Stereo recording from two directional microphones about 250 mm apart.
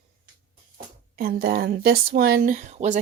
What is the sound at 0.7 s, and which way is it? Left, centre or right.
Speech, right.